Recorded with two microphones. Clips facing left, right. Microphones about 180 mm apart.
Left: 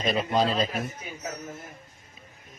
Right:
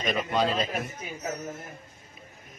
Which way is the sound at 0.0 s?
35° left (ahead or behind).